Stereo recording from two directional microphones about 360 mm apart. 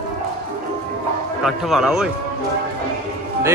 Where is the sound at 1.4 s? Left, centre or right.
Centre.